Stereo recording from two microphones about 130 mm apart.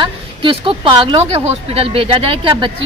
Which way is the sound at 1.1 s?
50° right (ahead or behind).